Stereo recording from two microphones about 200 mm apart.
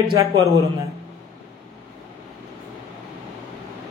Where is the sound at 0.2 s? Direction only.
15° right (ahead or behind).